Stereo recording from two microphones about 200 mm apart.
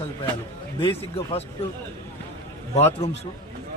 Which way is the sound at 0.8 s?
25° left (ahead or behind).